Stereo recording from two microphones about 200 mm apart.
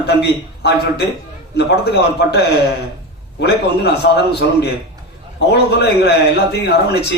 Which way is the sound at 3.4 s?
55° left (ahead or behind).